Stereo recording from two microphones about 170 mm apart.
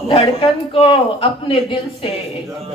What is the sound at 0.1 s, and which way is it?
A woman's voice, 35° left (ahead or behind).